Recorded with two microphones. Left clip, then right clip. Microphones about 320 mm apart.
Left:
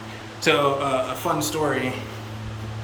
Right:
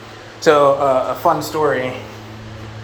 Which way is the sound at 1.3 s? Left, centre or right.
Centre.